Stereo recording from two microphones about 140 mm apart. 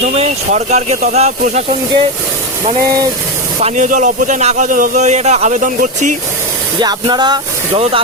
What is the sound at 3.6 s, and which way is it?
Speech, 60° right (ahead or behind).